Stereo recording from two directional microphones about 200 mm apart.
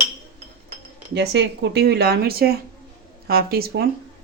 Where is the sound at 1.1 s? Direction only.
60° right (ahead or behind).